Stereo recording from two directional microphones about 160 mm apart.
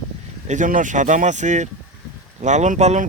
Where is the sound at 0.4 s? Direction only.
50° right (ahead or behind).